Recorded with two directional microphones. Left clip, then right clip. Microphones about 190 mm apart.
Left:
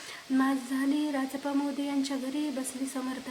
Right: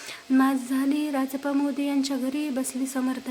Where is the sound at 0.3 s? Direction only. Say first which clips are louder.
Right 5 dB; 35° right (ahead or behind).